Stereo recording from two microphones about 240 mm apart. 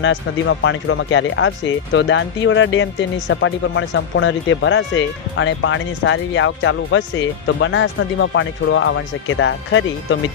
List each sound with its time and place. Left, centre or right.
0.0 s speech: left